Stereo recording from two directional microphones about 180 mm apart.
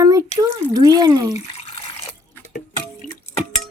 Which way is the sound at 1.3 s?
35° left (ahead or behind).